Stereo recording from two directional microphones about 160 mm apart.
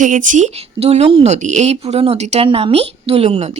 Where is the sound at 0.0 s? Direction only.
55° right (ahead or behind).